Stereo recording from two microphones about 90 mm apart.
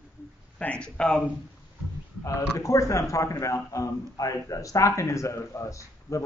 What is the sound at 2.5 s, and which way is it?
A man's voice, 35° left (ahead or behind).